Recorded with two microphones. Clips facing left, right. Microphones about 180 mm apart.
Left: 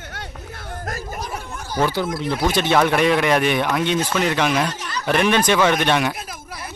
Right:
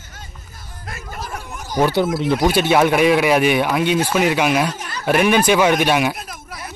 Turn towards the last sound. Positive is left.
turn(degrees=-10)  # may be behind; listen again after turning